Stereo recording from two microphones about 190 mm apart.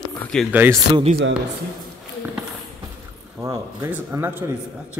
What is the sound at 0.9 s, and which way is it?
Speech, 35° right (ahead or behind).